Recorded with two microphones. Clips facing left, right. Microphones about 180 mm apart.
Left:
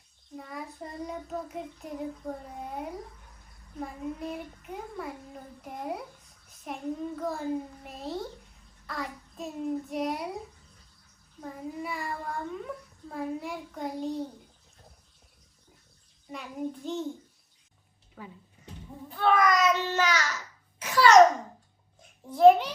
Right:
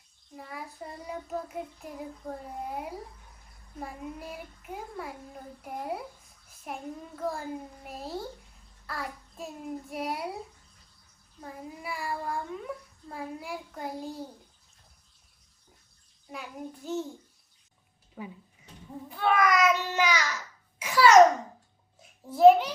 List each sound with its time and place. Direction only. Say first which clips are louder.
0.3 s a child's voice: left 2 dB; 5° right (ahead or behind)
11.3 s a child's voice: left 5 dB; centre (ahead or behind)
16.2 s a child's voice: left 5 dB; centre (ahead or behind)
18.2 s a child's voice: right 4 dB; 15° right (ahead or behind)
22.3 s a child's voice: right 1 dB; 5° right (ahead or behind)